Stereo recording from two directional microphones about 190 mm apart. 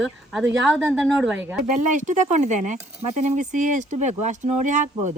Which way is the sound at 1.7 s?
40° right (ahead or behind).